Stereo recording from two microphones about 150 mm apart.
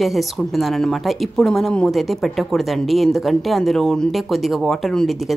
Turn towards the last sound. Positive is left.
turn(degrees=0)  # may be behind; listen again after turning